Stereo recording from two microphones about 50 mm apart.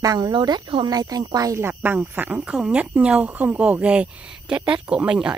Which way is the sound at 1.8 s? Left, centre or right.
Right.